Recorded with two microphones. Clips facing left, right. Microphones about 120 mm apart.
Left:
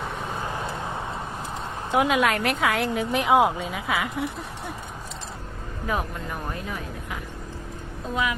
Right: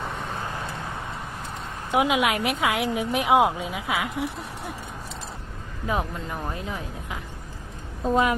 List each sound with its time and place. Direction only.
1.9 s a woman's voice: 10° right (ahead or behind)
5.9 s speech: 20° right (ahead or behind)
8.1 s a woman's voice: 45° right (ahead or behind)